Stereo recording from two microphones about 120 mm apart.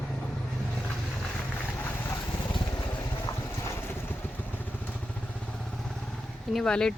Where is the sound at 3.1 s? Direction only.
25° left (ahead or behind).